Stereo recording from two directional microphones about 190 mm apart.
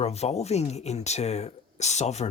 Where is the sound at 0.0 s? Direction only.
35° left (ahead or behind).